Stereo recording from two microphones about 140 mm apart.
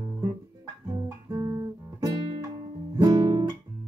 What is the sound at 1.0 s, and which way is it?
Guitar, 30° right (ahead or behind).